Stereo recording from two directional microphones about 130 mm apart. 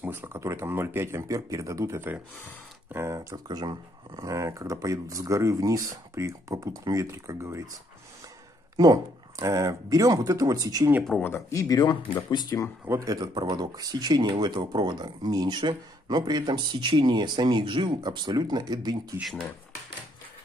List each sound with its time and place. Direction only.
0.0 s speech: 15° right (ahead or behind)
3.2 s speech: 30° right (ahead or behind)
8.7 s speech: 30° right (ahead or behind)
11.2 s speech: 20° left (ahead or behind)
12.8 s speech: 25° right (ahead or behind)